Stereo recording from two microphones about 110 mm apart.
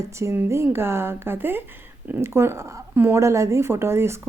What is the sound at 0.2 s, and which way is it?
Speech, 25° right (ahead or behind).